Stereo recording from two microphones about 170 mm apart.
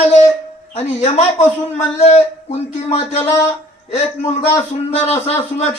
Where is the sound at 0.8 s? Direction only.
40° left (ahead or behind).